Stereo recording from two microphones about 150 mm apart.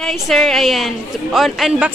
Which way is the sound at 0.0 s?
Centre (ahead or behind).